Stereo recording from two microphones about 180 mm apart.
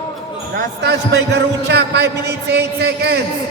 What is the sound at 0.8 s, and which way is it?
A man's voice, 70° right (ahead or behind).